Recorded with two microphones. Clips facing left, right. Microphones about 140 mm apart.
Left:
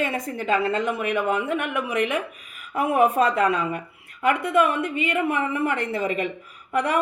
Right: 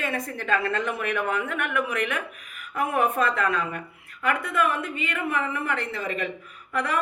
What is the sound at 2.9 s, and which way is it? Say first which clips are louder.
Speech: left 5 dB; 35° left (ahead or behind).